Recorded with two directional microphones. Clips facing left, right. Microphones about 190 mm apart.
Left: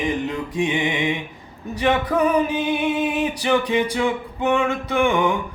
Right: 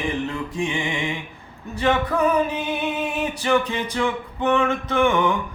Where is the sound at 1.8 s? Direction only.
15° left (ahead or behind).